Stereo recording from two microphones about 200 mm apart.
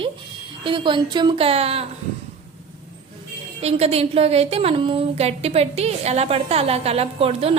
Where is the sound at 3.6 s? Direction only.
30° right (ahead or behind).